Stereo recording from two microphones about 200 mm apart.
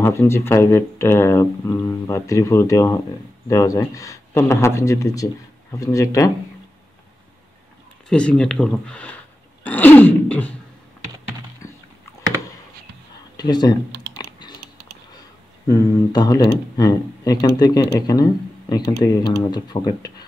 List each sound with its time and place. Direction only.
0.0 s speech: 15° left (ahead or behind)
8.1 s speech: 5° left (ahead or behind)
11.6 s rowboat: 15° left (ahead or behind)
13.4 s typing: 20° left (ahead or behind)
15.6 s speech: 15° left (ahead or behind)